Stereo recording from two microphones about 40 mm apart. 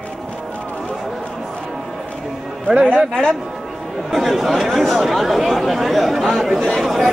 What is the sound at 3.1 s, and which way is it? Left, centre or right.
Speech, centre.